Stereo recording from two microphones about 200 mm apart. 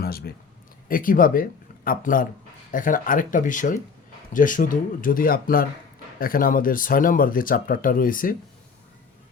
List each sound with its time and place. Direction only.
0.0 s speech: 50° left (ahead or behind)